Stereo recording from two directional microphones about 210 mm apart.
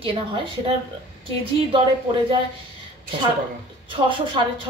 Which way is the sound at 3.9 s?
25° right (ahead or behind).